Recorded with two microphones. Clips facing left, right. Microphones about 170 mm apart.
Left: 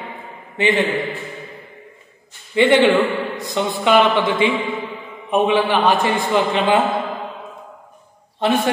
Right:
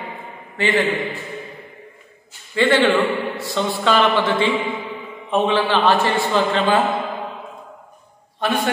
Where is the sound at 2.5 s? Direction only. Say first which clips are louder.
Left 3 dB; 20° left (ahead or behind).